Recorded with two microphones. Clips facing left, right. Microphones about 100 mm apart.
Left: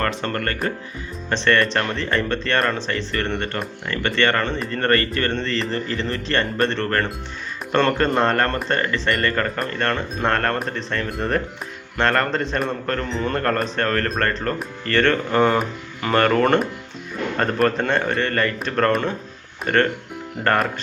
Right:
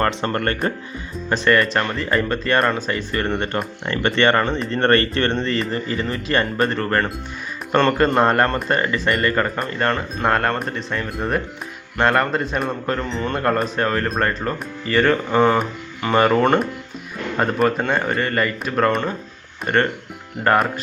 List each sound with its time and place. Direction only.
0.0 s speech: 20° right (ahead or behind)
1.3 s speech: 10° right (ahead or behind)
8.4 s a man's voice: centre (ahead or behind)